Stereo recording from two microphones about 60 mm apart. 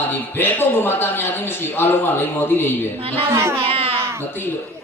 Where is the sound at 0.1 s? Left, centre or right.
Left.